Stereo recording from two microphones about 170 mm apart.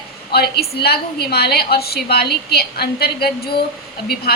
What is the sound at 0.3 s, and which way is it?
A woman's voice, 70° left (ahead or behind).